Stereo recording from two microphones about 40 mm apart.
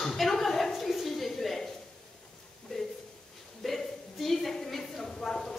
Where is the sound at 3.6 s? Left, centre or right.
Centre.